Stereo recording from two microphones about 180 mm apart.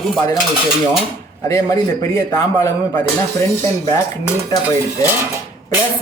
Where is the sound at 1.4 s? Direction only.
20° left (ahead or behind).